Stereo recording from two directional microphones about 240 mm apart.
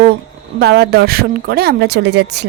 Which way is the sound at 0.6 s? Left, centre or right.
Right.